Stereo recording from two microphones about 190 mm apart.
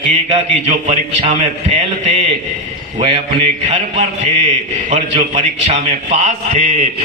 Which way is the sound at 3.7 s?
35° right (ahead or behind).